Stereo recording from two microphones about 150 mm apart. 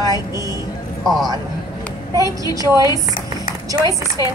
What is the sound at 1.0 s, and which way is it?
Speech, centre (ahead or behind).